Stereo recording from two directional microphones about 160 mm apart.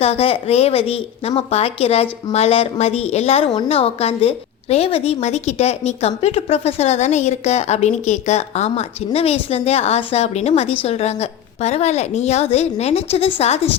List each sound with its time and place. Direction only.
0.0 s a woman's voice: 40° left (ahead or behind)